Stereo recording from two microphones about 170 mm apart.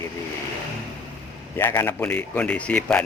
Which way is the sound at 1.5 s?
15° left (ahead or behind).